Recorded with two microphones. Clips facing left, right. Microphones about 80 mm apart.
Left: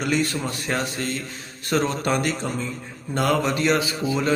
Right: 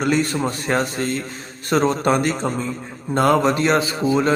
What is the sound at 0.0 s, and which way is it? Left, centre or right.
A man's voice, right.